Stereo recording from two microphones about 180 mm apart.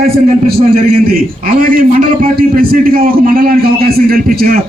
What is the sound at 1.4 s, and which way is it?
A man's voice, 50° right (ahead or behind).